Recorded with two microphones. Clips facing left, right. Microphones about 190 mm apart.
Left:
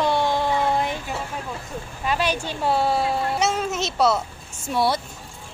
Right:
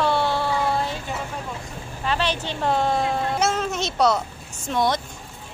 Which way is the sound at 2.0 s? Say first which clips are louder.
Left 1 dB; 10° left (ahead or behind).